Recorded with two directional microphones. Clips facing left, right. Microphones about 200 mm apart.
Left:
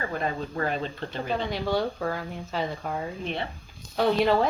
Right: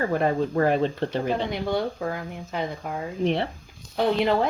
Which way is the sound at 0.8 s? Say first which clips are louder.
Right 8 dB; 30° right (ahead or behind).